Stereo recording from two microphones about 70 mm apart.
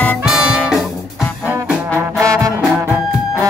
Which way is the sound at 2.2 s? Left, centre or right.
Right.